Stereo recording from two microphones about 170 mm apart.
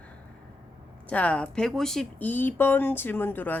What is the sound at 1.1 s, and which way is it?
Speech, 10° left (ahead or behind).